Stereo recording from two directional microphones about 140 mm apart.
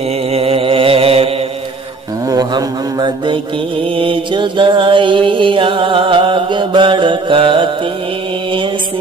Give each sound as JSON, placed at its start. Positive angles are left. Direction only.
{"t": 0.3, "sound": "mantra", "side_deg": -45}
{"t": 2.2, "sound": "mantra", "side_deg": -30}